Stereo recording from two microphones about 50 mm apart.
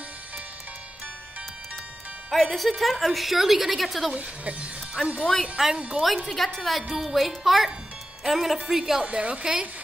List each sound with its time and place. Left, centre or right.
2.3 s speech: centre
4.1 s speech: right
5.2 s a woman's voice: centre
5.6 s a woman's voice: centre
9.0 s a woman's voice: right